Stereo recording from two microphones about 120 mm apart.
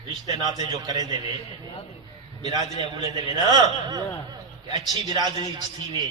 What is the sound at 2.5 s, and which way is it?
A man's voice, 40° right (ahead or behind).